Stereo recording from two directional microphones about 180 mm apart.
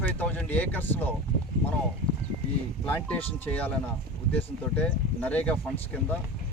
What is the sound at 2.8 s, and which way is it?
Speech, 10° left (ahead or behind).